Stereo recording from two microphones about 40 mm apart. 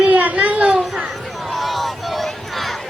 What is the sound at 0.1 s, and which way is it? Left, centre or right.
Children playing, right.